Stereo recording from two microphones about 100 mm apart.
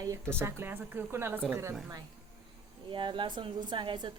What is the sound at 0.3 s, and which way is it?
Speech, 25° right (ahead or behind).